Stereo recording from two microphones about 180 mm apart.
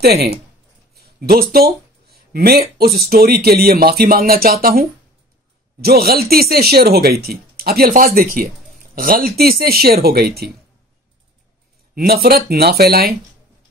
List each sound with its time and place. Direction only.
0.0 s speech: 65° right (ahead or behind)
11.9 s speech: 60° right (ahead or behind)